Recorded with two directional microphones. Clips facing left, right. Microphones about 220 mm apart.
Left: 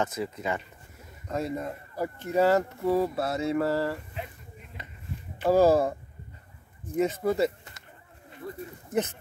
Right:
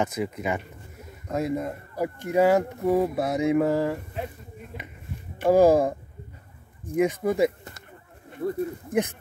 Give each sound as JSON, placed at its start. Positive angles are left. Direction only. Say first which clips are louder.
{"t": 0.0, "sound": "speech", "louder": "right 3 dB", "side_deg": -15}
{"t": 5.4, "sound": "speech", "louder": "right 3 dB", "side_deg": -15}
{"t": 7.0, "sound": "speech", "louder": "right 3 dB", "side_deg": -15}
{"t": 8.4, "sound": "speech", "louder": "right 11 dB", "side_deg": -60}